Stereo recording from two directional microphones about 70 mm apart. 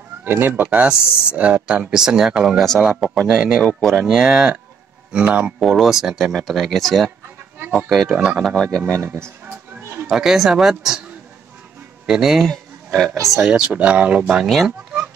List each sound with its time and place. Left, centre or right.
0.2 s speech: right
0.7 s speech: centre
5.1 s speech: centre
5.6 s speech: centre
8.8 s speech: right
10.0 s speech: centre
12.1 s speech: centre
13.3 s speech: centre
14.2 s speech: centre